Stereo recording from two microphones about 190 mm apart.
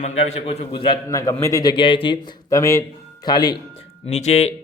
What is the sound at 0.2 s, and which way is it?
A man's voice, 35° left (ahead or behind).